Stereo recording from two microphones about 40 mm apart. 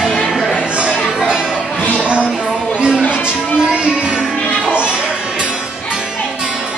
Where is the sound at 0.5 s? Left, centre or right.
Right.